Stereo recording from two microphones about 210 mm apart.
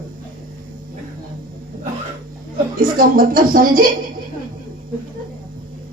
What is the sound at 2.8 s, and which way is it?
Speech, 40° right (ahead or behind).